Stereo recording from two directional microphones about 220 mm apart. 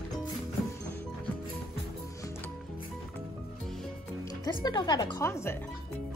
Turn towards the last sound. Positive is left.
turn(degrees=10)  # may be behind; listen again after turning